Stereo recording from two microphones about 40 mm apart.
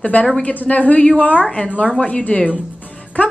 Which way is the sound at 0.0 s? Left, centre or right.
Left.